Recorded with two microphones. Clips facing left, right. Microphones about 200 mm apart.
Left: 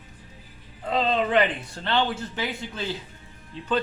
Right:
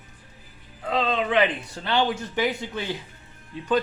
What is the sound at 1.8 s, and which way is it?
A man's voice, 10° right (ahead or behind).